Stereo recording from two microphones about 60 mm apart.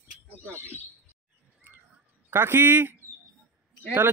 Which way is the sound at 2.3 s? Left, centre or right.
Right.